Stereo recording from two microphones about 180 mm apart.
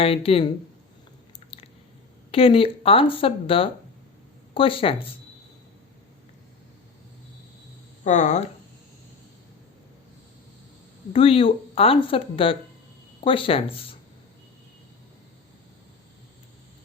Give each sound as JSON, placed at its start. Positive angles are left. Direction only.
{"t": 0.0, "sound": "speech", "side_deg": 30}
{"t": 1.5, "sound": "chewing", "side_deg": 30}
{"t": 2.3, "sound": "speech", "side_deg": 30}
{"t": 8.0, "sound": "speech", "side_deg": 40}
{"t": 11.1, "sound": "speech", "side_deg": 30}